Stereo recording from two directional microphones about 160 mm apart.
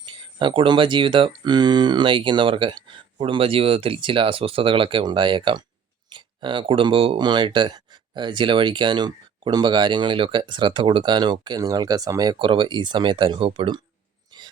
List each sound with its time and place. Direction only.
0.0 s speech: 30° right (ahead or behind)